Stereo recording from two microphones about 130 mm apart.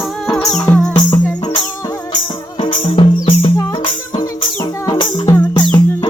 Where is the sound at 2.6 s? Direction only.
40° left (ahead or behind).